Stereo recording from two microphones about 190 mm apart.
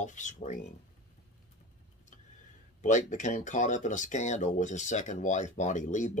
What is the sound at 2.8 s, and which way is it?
Speech, 40° left (ahead or behind).